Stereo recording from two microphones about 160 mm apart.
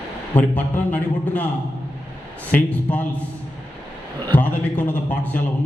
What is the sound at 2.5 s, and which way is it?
Speech, 10° left (ahead or behind).